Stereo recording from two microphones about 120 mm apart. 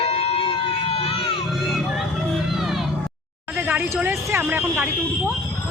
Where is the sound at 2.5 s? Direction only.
Centre (ahead or behind).